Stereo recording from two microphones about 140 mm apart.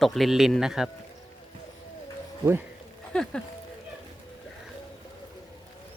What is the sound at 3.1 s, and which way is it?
Speech, 5° left (ahead or behind).